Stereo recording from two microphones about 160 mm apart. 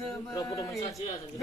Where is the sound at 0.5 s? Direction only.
20° left (ahead or behind).